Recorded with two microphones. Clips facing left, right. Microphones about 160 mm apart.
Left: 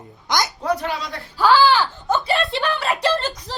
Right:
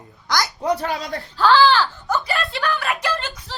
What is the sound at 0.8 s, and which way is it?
Speech, 45° right (ahead or behind).